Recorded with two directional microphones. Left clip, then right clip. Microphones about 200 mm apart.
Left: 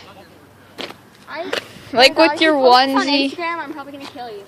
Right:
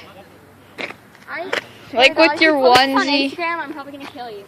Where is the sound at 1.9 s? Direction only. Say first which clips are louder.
Left 1 dB; 25° left (ahead or behind).